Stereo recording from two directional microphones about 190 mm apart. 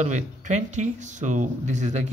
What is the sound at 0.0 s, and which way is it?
Speech, 40° right (ahead or behind).